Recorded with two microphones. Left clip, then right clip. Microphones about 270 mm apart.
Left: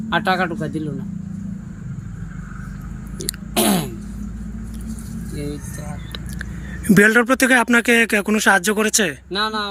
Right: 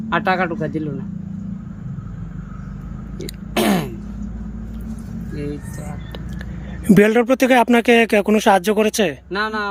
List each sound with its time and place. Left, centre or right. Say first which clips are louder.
0.1 s speech: right 1 dB; centre
3.2 s a sound: even; centre
6.8 s speech: even; centre